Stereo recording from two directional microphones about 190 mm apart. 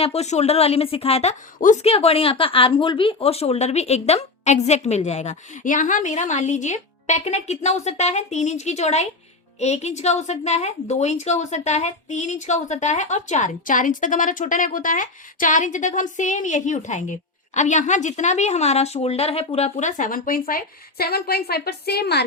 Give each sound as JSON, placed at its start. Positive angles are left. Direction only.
{"t": 0.0, "sound": "a woman's voice", "side_deg": 35}